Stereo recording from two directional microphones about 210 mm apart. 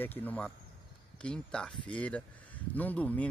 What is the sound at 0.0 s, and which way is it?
Speech, 10° left (ahead or behind).